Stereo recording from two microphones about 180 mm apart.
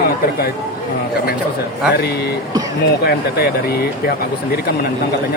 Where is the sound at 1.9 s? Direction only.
65° left (ahead or behind).